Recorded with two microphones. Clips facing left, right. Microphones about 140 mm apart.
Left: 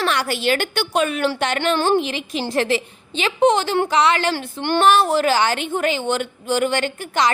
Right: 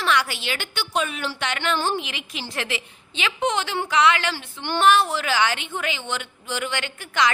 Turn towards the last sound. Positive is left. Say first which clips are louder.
# left 4 dB
turn(degrees=40)  # may be behind; listen again after turning